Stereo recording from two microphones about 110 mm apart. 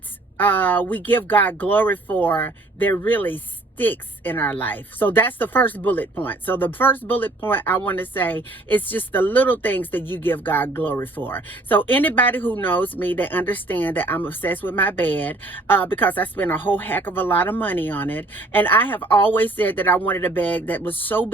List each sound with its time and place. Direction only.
0.3 s speech: 15° left (ahead or behind)